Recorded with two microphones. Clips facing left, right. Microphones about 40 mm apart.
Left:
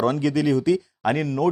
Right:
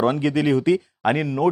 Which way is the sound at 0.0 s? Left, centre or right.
Right.